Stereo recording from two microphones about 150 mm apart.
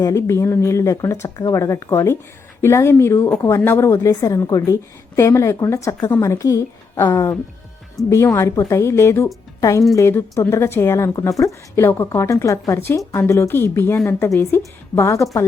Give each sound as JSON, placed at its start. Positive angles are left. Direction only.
{"t": 0.0, "sound": "a woman's voice", "side_deg": 20}